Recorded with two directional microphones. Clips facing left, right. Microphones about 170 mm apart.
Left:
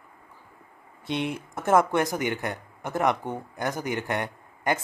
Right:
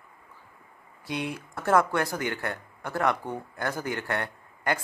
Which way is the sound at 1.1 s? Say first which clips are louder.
Left 3 dB; 25° left (ahead or behind).